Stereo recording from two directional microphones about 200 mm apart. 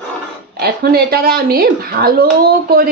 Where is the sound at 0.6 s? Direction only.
50° right (ahead or behind).